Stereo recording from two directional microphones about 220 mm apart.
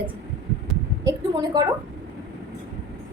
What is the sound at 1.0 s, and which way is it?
Speech, 15° right (ahead or behind).